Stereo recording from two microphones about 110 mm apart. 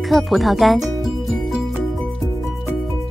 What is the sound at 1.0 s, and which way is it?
Music, centre (ahead or behind).